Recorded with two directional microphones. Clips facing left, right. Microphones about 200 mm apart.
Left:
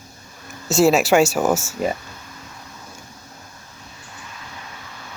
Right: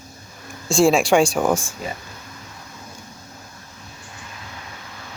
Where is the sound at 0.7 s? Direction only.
5° left (ahead or behind).